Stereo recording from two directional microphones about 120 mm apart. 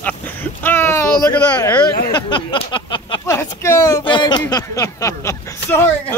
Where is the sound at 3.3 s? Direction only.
25° left (ahead or behind).